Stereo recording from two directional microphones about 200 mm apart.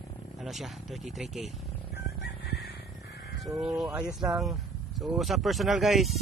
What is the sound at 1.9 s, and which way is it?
Fowl, 55° left (ahead or behind).